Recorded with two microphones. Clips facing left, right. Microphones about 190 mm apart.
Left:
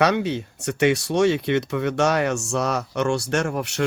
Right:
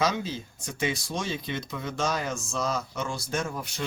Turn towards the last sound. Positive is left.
turn(degrees=70)  # may be behind; listen again after turning